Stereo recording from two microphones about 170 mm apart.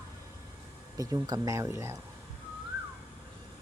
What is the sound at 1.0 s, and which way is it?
Speech, 20° right (ahead or behind).